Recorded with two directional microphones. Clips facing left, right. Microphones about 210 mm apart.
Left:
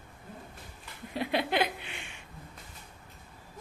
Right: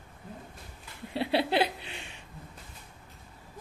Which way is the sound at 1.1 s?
30° right (ahead or behind).